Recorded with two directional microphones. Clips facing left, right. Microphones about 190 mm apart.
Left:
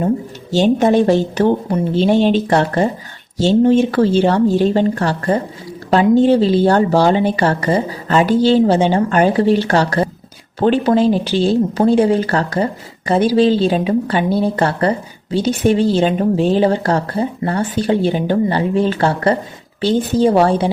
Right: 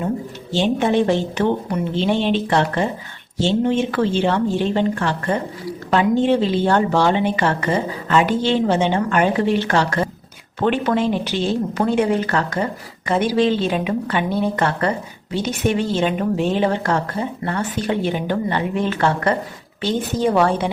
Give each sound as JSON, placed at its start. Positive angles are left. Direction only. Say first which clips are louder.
{"t": 0.5, "sound": "a woman's voice", "louder": "left 5 dB", "side_deg": 40}